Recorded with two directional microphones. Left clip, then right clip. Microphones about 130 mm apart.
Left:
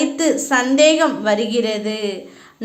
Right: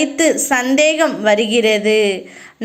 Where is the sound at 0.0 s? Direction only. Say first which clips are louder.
Right 3 dB; 25° right (ahead or behind).